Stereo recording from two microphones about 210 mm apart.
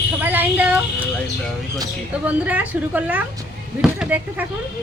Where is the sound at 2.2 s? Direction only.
5° right (ahead or behind).